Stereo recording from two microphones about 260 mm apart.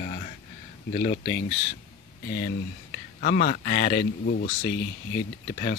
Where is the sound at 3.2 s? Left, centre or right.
Left.